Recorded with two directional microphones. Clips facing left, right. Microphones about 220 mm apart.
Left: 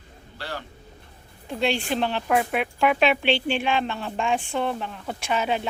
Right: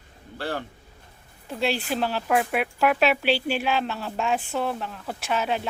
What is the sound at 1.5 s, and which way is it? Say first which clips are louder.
Speech: left 1 dB; 5° right (ahead or behind).